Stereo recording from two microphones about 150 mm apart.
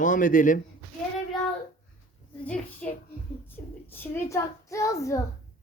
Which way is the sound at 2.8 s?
10° left (ahead or behind).